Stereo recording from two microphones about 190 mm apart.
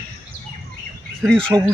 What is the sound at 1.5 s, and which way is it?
Speech, 10° right (ahead or behind).